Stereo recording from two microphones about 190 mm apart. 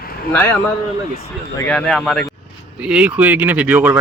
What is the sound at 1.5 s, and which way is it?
Speech, 5° left (ahead or behind).